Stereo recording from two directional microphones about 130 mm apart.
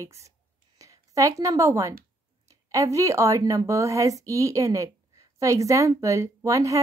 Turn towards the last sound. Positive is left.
turn(degrees=-25)  # may be behind; listen again after turning